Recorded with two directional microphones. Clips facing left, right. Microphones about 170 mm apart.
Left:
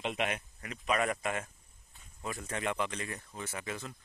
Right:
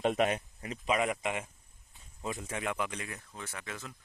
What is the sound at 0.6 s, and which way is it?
Speech, 30° right (ahead or behind).